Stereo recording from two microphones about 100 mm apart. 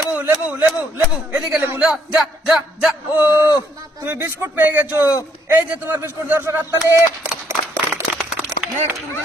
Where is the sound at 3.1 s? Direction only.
25° right (ahead or behind).